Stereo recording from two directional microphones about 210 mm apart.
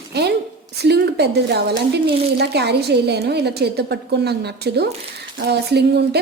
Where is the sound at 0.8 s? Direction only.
50° right (ahead or behind).